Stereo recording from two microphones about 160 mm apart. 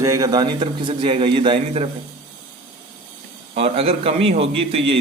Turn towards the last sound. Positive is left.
turn(degrees=-35)  # may be behind; listen again after turning